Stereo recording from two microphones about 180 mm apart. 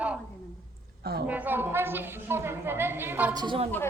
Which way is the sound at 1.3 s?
10° right (ahead or behind).